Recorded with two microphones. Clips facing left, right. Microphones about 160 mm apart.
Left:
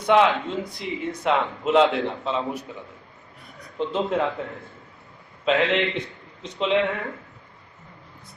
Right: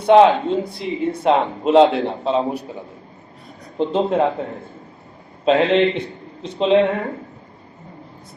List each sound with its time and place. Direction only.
0.0 s speech: 30° right (ahead or behind)